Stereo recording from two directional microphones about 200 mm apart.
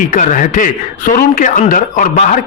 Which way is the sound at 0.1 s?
40° left (ahead or behind).